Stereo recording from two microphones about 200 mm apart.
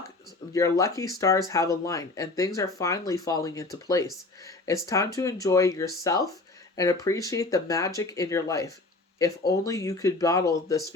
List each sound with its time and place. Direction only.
0.5 s speech: 15° left (ahead or behind)